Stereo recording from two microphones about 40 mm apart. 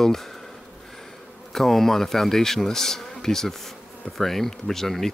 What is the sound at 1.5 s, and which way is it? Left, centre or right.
Speech, centre.